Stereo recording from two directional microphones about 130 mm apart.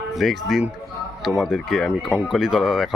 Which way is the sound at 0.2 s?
Centre (ahead or behind).